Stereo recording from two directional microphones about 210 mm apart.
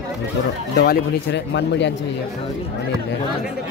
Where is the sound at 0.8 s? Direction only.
55° left (ahead or behind).